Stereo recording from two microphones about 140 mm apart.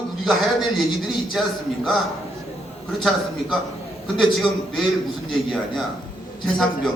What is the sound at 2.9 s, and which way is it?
A man's voice, centre (ahead or behind).